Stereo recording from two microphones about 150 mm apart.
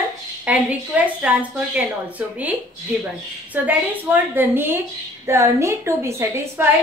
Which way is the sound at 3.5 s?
10° right (ahead or behind).